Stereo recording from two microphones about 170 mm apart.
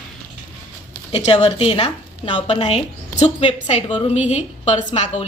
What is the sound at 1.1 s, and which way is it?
A woman's voice, 35° left (ahead or behind).